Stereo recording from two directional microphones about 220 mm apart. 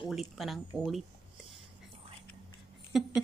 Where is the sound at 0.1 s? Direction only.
Centre (ahead or behind).